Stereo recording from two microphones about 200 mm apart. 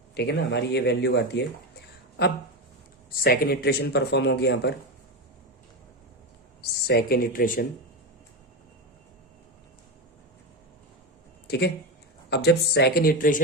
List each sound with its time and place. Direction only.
0.1 s speech: 55° left (ahead or behind)
6.6 s speech: 55° left (ahead or behind)
11.4 s speech: 55° left (ahead or behind)